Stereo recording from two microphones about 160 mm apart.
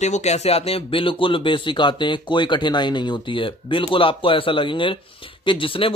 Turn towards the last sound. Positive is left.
turn(degrees=35)  # may be behind; listen again after turning